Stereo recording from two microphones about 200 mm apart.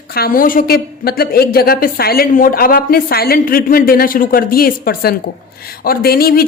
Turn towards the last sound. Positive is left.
turn(degrees=50)  # may be behind; listen again after turning